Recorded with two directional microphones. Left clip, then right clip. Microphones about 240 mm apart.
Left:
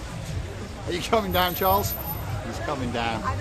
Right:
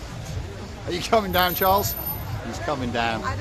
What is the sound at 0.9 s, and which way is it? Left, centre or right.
Speech, centre.